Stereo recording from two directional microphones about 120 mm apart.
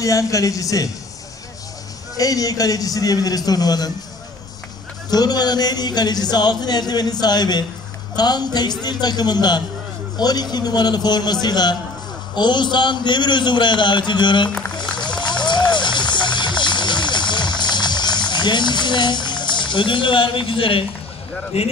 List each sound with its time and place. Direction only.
0.0 s a woman's voice: 30° left (ahead or behind)
2.1 s speech: 30° left (ahead or behind)
5.1 s speech: 35° left (ahead or behind)
14.8 s music: 40° left (ahead or behind)
21.5 s speech: 55° left (ahead or behind)